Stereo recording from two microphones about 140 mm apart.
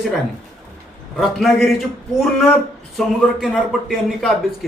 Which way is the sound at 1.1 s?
Centre (ahead or behind).